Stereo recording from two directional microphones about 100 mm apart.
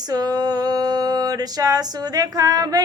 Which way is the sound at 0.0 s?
40° right (ahead or behind).